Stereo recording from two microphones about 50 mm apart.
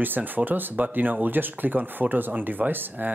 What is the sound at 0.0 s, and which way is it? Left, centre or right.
Speech, right.